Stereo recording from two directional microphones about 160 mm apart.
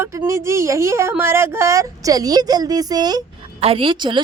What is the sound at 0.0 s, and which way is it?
A woman's voice, 15° right (ahead or behind).